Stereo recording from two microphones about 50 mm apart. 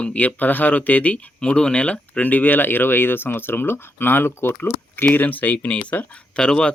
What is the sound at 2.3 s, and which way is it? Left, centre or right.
Speech, left.